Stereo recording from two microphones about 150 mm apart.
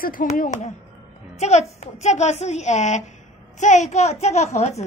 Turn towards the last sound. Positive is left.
turn(degrees=45)  # may be behind; listen again after turning